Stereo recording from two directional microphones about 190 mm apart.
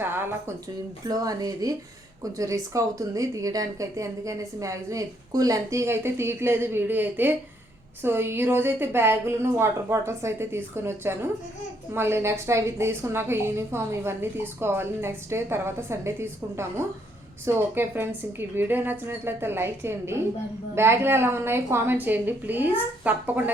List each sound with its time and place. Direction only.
0.0 s a woman's voice: 10° right (ahead or behind)
2.7 s a woman's voice: 15° right (ahead or behind)